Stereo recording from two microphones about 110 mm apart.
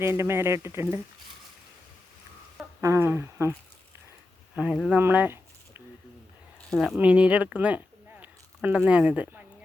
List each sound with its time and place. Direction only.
0.0 s speech: 25° right (ahead or behind)
2.8 s speech: 25° right (ahead or behind)
4.5 s speech: 10° right (ahead or behind)
4.9 s a sound: 20° right (ahead or behind)
6.7 s speech: centre (ahead or behind)